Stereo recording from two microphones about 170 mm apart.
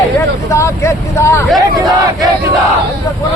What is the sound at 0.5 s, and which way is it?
Vehicle, 15° left (ahead or behind).